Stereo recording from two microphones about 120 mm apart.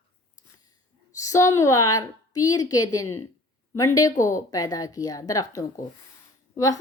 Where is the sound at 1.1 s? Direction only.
25° left (ahead or behind).